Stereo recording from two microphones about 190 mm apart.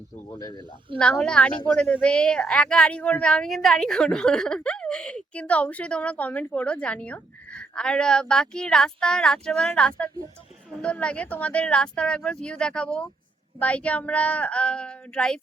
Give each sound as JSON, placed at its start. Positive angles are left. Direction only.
{"t": 0.3, "sound": "speech", "side_deg": 20}
{"t": 0.9, "sound": "a woman's voice", "side_deg": 5}